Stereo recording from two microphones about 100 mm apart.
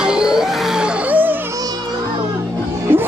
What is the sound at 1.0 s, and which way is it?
Music, 20° right (ahead or behind).